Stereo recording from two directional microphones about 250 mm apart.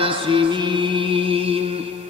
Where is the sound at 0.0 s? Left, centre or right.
Right.